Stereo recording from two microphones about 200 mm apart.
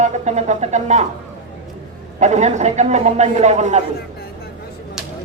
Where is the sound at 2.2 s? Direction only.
35° right (ahead or behind).